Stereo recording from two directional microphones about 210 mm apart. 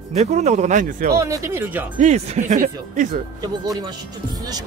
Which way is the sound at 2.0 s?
35° right (ahead or behind).